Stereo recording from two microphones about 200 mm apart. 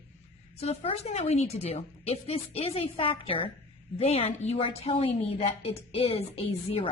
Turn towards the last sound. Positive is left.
turn(degrees=30)  # may be behind; listen again after turning